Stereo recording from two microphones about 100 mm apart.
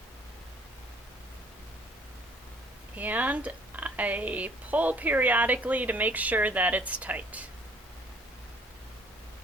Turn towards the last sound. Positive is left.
turn(degrees=-15)  # may be behind; listen again after turning